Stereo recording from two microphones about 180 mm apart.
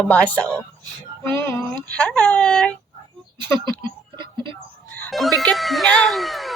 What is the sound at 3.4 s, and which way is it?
Speech, 25° right (ahead or behind).